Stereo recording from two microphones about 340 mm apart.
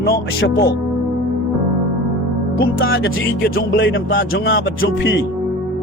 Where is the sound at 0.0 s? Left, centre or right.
Left.